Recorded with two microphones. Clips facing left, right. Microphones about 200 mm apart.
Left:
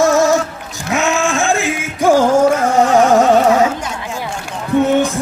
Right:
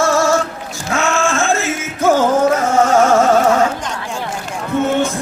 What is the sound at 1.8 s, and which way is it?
Music, 15° left (ahead or behind).